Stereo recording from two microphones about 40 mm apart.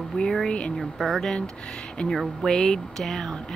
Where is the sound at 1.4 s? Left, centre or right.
Left.